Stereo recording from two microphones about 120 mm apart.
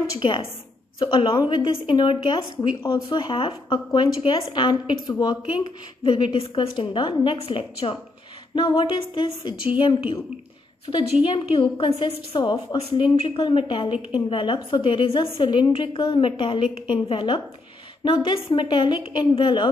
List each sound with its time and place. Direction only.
0.2 s a woman's voice: 45° left (ahead or behind)
10.9 s a woman's voice: 30° left (ahead or behind)
11.2 s a woman's voice: 45° left (ahead or behind)
13.1 s a woman's voice: 55° left (ahead or behind)